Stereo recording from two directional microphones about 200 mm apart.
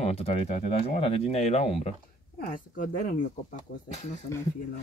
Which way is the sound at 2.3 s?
40° left (ahead or behind).